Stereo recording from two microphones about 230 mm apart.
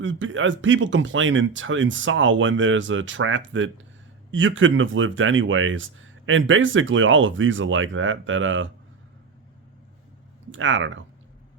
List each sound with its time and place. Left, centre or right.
0.0 s speech: right
10.5 s speech: right